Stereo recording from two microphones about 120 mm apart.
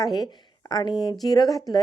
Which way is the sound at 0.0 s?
35° left (ahead or behind).